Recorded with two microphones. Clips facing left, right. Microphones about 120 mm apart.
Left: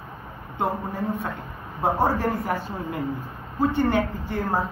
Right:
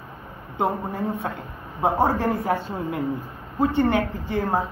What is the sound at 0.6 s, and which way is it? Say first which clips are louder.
Speech: right 2 dB; 25° right (ahead or behind).